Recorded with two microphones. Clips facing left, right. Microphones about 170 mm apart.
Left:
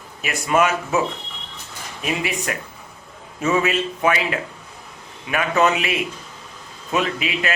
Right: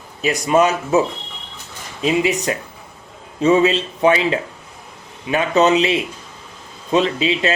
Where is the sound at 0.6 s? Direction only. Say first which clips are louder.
Right 3 dB; 35° right (ahead or behind).